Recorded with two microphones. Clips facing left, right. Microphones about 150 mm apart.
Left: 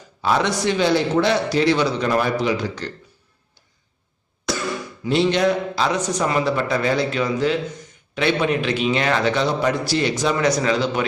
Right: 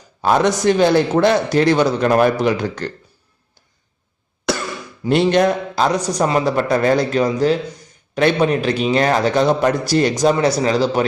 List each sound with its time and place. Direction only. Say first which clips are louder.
0.2 s a man's voice: right 4 dB; 45° right (ahead or behind)
4.5 s cough: right 4 dB; 65° right (ahead or behind)
5.0 s a man's voice: right 4 dB; 50° right (ahead or behind)
6.1 s a man's voice: right 3 dB; 35° right (ahead or behind)
10.3 s a man's voice: right 3 dB; 30° right (ahead or behind)